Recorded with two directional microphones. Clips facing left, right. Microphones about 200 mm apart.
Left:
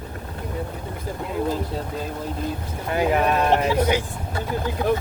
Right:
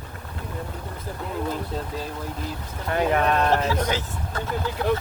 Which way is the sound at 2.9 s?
10° left (ahead or behind).